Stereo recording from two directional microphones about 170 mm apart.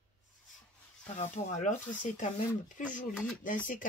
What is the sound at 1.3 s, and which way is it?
Speech, 45° left (ahead or behind).